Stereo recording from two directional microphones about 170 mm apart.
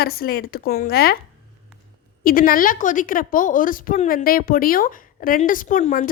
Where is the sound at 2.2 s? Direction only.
55° left (ahead or behind).